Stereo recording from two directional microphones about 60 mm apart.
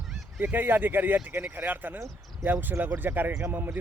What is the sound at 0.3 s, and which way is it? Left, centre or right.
Speech, right.